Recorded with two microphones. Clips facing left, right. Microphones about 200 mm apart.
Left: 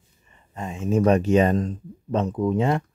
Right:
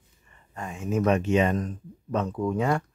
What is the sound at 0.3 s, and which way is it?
Speech, 20° left (ahead or behind).